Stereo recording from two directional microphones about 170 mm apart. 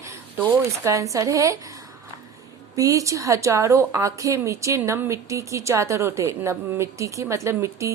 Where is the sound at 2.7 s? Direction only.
20° right (ahead or behind).